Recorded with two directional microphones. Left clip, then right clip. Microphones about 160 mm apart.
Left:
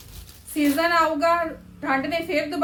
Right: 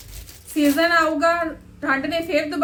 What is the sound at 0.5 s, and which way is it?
A woman's voice, 15° right (ahead or behind).